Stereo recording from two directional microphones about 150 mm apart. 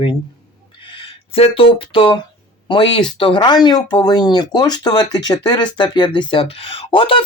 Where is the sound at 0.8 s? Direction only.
35° left (ahead or behind).